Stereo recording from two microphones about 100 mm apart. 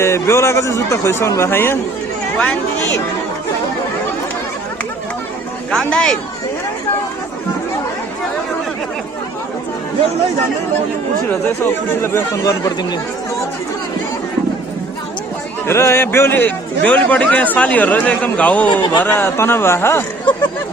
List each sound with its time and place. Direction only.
0.0 s speech: 30° left (ahead or behind)
5.7 s a man's voice: 10° left (ahead or behind)
11.4 s speech: 25° left (ahead or behind)
15.6 s a man's voice: 25° left (ahead or behind)
18.7 s speech: 50° left (ahead or behind)
19.0 s speech: 20° left (ahead or behind)